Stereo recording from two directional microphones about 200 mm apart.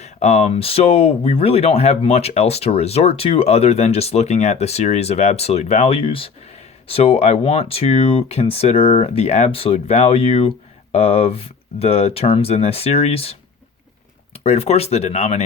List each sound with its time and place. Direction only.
0.0 s speech: 35° left (ahead or behind)
14.3 s speech: 30° left (ahead or behind)